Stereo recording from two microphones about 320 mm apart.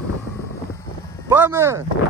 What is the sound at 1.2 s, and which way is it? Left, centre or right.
Speech, centre.